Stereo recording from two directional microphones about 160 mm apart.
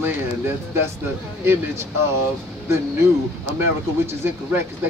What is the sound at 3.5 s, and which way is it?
Speech, 15° right (ahead or behind).